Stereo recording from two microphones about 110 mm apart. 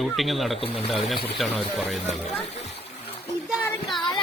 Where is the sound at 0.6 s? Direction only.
60° left (ahead or behind).